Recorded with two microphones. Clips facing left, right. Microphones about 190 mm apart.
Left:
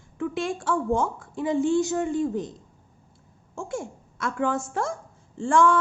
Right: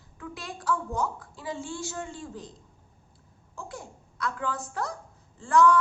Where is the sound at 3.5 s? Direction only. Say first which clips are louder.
Left 9 dB; 25° left (ahead or behind).